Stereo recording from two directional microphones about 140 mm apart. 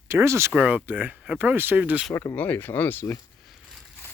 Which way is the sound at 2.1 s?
15° left (ahead or behind).